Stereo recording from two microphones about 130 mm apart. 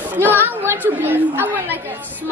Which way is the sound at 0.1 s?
15° right (ahead or behind).